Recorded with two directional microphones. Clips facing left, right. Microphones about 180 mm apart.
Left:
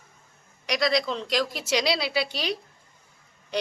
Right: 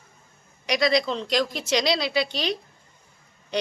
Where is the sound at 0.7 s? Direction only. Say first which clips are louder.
Right 3 dB; centre (ahead or behind).